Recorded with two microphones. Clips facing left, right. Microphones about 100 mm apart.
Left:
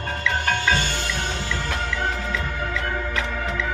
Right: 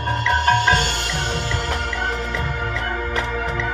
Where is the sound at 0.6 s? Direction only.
65° right (ahead or behind).